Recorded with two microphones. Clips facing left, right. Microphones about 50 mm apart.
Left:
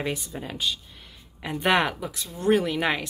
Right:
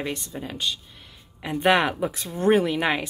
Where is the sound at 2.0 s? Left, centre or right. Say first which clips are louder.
Right 6 dB; right.